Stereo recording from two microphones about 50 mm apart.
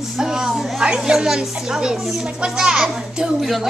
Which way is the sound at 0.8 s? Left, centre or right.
Centre.